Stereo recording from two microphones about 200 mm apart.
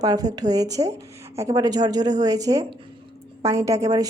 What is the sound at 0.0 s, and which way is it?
A woman's voice, 20° right (ahead or behind).